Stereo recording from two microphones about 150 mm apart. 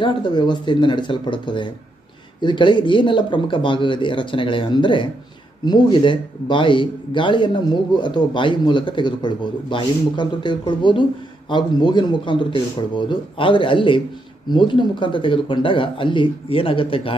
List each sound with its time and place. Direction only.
0.0 s speech: 30° left (ahead or behind)